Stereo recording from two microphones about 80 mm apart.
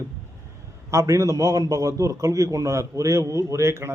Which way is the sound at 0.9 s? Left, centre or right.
Right.